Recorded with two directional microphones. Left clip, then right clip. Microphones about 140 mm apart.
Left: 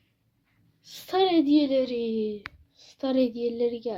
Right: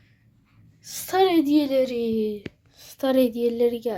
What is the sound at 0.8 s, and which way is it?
A woman's voice, 10° right (ahead or behind).